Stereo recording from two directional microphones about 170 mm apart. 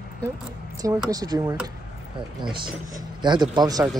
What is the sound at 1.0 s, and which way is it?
Speech, 25° right (ahead or behind).